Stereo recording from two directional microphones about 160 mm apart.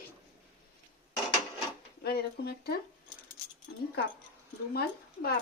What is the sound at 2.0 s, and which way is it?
Speech, 80° left.